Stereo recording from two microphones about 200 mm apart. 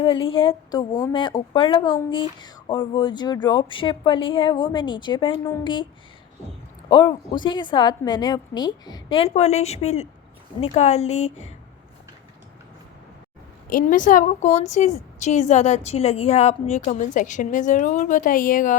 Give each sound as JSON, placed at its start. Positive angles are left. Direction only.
{"t": 0.0, "sound": "a woman's voice", "side_deg": 25}
{"t": 6.9, "sound": "a woman's voice", "side_deg": 20}
{"t": 13.7, "sound": "a woman's voice", "side_deg": 40}